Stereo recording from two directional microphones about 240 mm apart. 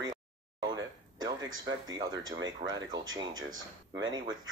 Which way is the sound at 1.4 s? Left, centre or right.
Right.